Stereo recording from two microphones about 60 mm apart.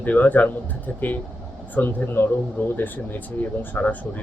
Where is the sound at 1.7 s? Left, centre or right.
Left.